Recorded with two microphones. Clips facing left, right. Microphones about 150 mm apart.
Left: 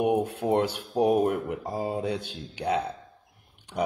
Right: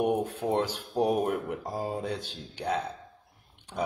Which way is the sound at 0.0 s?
10° left (ahead or behind).